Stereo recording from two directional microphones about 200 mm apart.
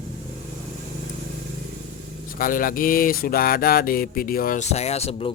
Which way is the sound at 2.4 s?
45° left (ahead or behind).